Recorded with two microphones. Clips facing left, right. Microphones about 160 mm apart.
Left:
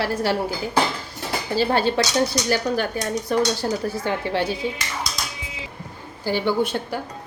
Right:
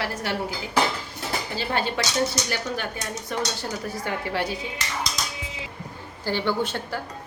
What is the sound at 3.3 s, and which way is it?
Speech, 40° left (ahead or behind).